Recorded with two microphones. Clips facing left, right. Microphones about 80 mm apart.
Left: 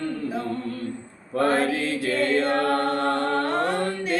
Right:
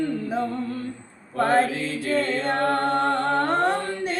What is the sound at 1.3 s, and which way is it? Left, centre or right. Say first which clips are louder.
A capella: right 1 dB; right.